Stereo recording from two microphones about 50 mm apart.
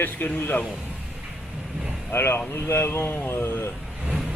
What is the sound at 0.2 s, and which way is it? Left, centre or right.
Speech, left.